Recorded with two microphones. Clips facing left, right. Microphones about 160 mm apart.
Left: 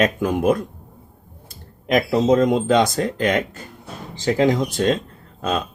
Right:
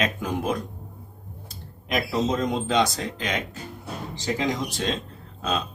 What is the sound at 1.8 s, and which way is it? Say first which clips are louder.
Speech: left 8 dB; 55° left (ahead or behind).